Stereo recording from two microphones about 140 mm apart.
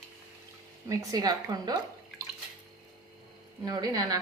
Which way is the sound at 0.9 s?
30° right (ahead or behind).